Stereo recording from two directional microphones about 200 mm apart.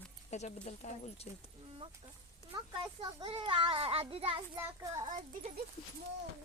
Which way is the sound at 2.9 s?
25° right (ahead or behind).